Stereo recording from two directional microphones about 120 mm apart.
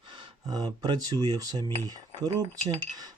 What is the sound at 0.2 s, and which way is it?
Speech, 35° right (ahead or behind).